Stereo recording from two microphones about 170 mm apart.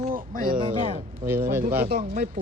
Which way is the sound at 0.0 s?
55° right (ahead or behind).